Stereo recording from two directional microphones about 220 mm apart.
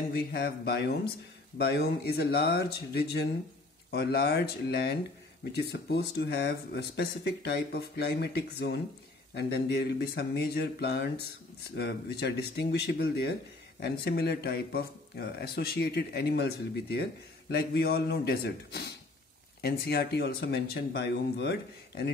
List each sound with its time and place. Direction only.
0.1 s speech: 45° left (ahead or behind)